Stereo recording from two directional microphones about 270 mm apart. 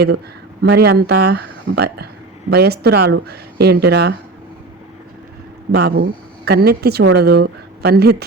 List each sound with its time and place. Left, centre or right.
0.6 s speech: right
5.7 s speech: right